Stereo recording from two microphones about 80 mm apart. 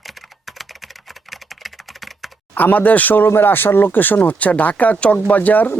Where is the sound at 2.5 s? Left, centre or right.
Left.